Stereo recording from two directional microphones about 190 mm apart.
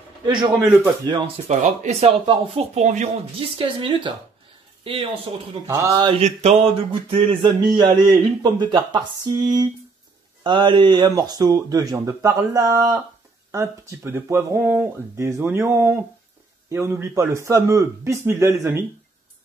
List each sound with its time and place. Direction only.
1.1 s speech: 30° right (ahead or behind)
5.7 s speech: 15° right (ahead or behind)